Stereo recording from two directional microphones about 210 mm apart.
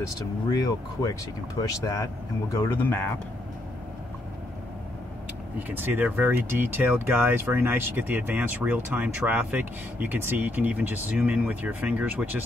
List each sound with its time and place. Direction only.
1.0 s speech: 15° left (ahead or behind)
5.6 s speech: 10° right (ahead or behind)